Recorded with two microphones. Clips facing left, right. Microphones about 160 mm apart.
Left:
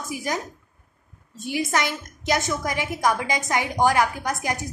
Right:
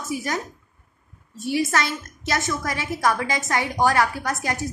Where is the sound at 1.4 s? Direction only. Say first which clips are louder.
Right 2 dB; 20° left (ahead or behind).